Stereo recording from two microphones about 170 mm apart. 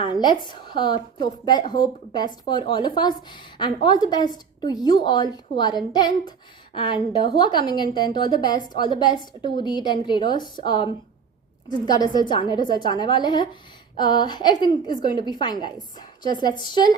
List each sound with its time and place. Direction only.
0.0 s a woman's voice: 25° left (ahead or behind)
7.3 s a woman's voice: 25° left (ahead or behind)